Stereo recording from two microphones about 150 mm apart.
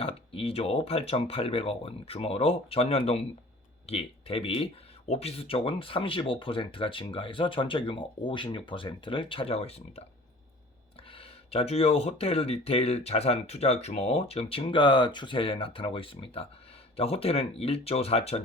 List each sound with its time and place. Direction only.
0.0 s speech: 40° left (ahead or behind)
11.1 s speech: 40° left (ahead or behind)